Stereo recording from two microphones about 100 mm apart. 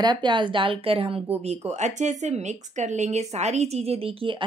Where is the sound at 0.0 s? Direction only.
50° right (ahead or behind); by 1.8 s 90° right.